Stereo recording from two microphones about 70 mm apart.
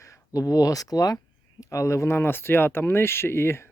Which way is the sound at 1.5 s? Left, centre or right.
Left.